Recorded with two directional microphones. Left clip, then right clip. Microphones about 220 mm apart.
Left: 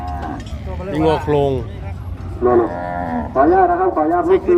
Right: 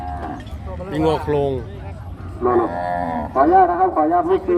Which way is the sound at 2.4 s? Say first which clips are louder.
Left 3 dB; 40° right (ahead or behind).